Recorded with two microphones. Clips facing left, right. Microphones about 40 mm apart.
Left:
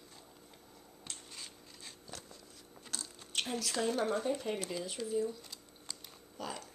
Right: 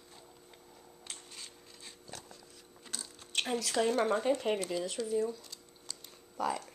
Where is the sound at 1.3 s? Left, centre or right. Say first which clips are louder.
Even; centre.